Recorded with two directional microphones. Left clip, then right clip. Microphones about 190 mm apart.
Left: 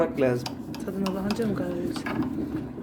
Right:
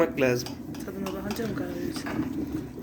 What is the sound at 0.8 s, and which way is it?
Speech, 55° left (ahead or behind).